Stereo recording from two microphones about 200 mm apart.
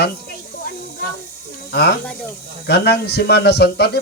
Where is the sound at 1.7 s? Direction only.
50° left (ahead or behind).